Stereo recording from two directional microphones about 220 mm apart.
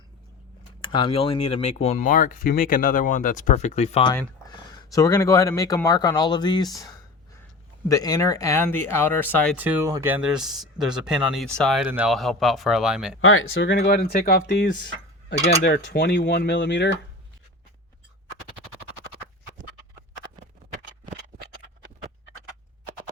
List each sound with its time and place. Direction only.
0.8 s speech: 20° left (ahead or behind)
9.6 s speech: 10° right (ahead or behind)
13.2 s speech: 65° left (ahead or behind)